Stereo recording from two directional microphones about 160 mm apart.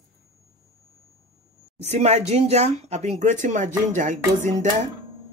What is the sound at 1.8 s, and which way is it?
Speech, 45° right (ahead or behind).